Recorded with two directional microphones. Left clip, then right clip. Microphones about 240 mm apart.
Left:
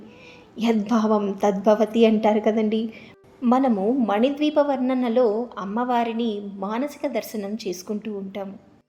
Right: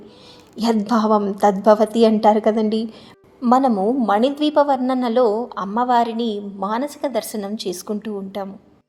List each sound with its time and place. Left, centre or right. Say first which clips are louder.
0.5 s a woman's voice: right 4 dB; right